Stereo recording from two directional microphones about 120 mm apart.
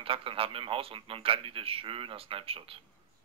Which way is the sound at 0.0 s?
50° right (ahead or behind).